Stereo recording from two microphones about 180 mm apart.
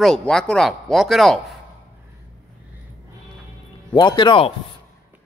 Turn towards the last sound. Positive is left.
turn(degrees=30)  # may be behind; listen again after turning